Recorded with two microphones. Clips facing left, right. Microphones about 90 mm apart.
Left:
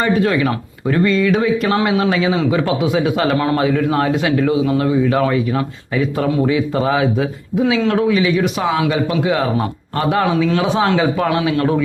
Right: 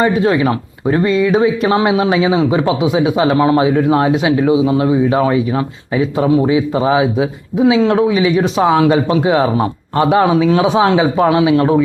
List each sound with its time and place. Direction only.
0.0 s speech: 25° right (ahead or behind)
1.1 s a sound: 15° right (ahead or behind)
1.4 s speech: 25° right (ahead or behind)